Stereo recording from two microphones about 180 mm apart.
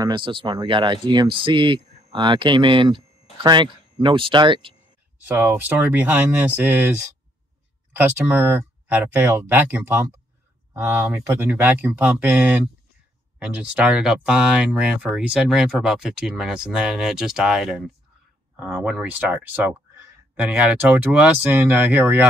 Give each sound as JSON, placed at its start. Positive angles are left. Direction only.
{"t": 0.0, "sound": "speech", "side_deg": -25}
{"t": 5.3, "sound": "speech", "side_deg": -10}